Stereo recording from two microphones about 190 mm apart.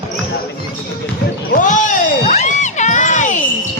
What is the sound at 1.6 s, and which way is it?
Crowd, 40° left (ahead or behind).